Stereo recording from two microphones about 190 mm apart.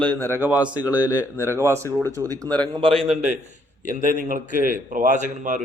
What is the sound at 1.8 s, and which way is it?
Speech, 10° left (ahead or behind).